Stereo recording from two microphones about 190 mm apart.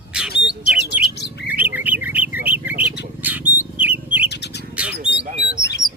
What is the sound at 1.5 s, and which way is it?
Bird, 10° right (ahead or behind).